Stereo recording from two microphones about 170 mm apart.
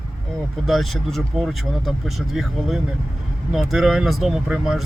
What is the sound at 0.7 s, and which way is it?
Speech, centre (ahead or behind).